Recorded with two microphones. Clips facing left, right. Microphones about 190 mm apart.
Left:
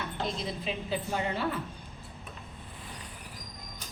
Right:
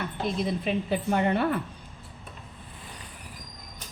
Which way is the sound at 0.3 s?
55° right (ahead or behind).